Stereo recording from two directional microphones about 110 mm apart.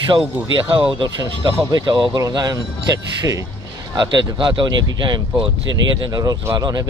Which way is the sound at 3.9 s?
40° right (ahead or behind).